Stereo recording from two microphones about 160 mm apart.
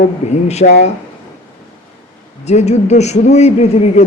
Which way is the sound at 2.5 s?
45° left (ahead or behind).